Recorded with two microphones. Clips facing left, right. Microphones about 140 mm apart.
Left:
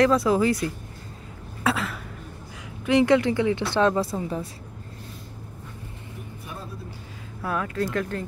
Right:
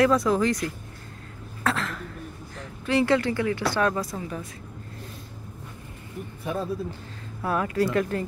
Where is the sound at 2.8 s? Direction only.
20° left (ahead or behind).